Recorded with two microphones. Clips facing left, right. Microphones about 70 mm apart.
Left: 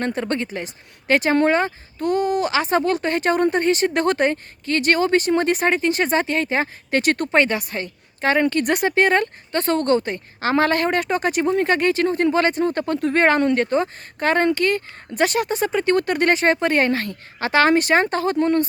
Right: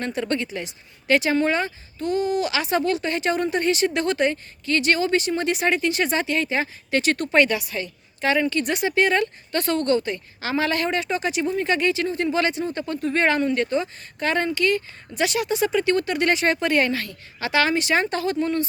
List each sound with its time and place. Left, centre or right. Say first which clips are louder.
0.0 s a woman's voice: left 2 dB; left